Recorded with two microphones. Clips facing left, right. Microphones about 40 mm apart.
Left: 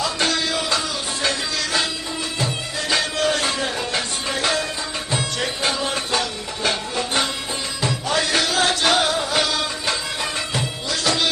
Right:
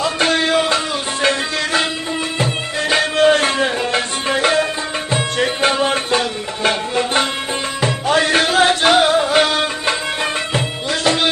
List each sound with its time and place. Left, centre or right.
0.0 s music: right
2.9 s music: right
11.0 s music: right